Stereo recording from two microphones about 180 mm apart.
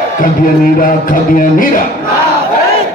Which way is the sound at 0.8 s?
50° left (ahead or behind).